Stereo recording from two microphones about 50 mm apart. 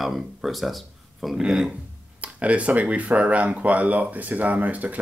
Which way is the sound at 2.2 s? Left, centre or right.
Right.